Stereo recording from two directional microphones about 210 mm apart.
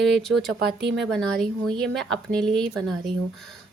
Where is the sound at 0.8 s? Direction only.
55° right (ahead or behind).